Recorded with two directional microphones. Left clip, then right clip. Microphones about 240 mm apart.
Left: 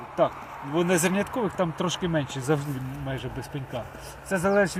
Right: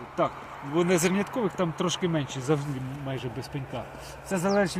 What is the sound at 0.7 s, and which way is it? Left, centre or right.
Speech, left.